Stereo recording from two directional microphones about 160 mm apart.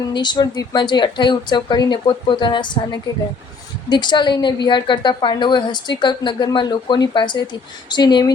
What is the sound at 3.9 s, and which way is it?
A woman's voice, 30° left (ahead or behind).